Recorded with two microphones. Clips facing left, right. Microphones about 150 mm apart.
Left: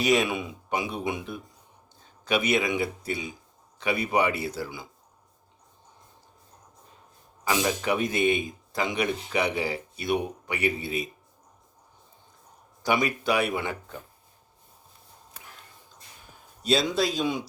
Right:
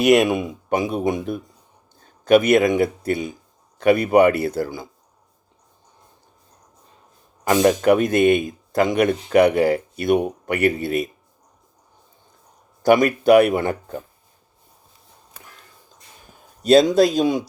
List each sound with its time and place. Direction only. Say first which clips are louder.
0.0 s speech: right 8 dB; 50° right (ahead or behind)
7.4 s speech: right 11 dB; 55° right (ahead or behind)
12.8 s speech: right 10 dB; 50° right (ahead or behind)
16.6 s speech: right 11 dB; 50° right (ahead or behind)